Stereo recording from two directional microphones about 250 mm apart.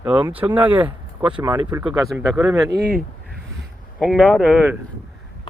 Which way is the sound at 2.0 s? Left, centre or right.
Centre.